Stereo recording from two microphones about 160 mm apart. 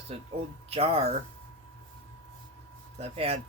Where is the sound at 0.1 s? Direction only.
40° right (ahead or behind).